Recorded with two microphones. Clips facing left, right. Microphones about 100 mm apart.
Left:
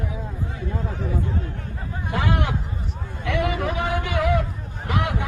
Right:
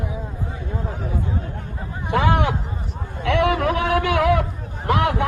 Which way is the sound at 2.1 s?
70° right (ahead or behind).